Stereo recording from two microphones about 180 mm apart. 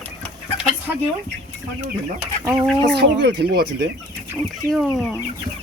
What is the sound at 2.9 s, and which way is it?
Speech, 60° right (ahead or behind).